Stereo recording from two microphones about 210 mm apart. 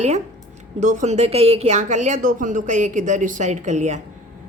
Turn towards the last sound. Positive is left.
turn(degrees=-35)  # may be behind; listen again after turning